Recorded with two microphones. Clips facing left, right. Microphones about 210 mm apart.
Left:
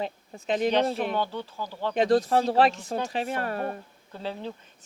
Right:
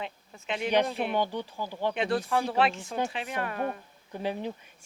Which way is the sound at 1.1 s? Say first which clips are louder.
Even; 15° right (ahead or behind).